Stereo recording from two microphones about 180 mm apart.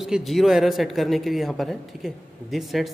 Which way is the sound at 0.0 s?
Centre (ahead or behind).